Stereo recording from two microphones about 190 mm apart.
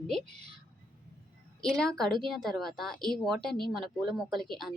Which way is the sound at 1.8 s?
5° left (ahead or behind).